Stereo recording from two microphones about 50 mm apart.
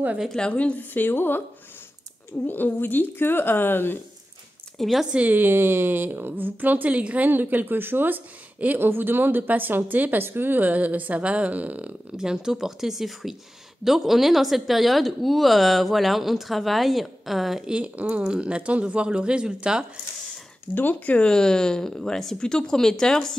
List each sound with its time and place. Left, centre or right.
0.5 s a woman's voice: left
0.7 s speech: left
2.4 s speech: left
4.7 s speech: centre
5.1 s a woman's voice: right
7.2 s a woman's voice: right
12.2 s speech: centre
17.6 s speech: right
20.7 s speech: left
21.2 s speech: centre